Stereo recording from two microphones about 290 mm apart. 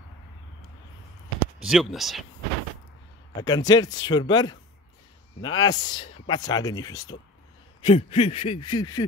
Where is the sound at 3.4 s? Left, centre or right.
Centre.